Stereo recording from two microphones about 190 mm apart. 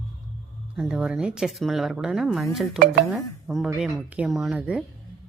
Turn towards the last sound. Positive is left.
turn(degrees=-5)  # may be behind; listen again after turning